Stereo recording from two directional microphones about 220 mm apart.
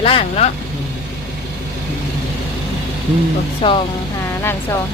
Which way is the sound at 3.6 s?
25° left (ahead or behind).